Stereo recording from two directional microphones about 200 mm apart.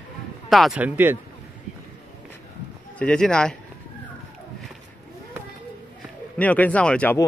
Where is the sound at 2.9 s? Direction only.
5° left (ahead or behind).